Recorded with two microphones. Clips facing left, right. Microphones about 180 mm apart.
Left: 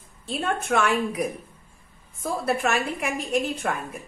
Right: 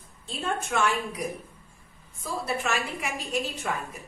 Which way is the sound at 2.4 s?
55° left (ahead or behind).